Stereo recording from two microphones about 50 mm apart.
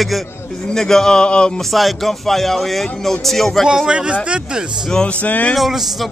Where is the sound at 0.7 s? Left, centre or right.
Centre.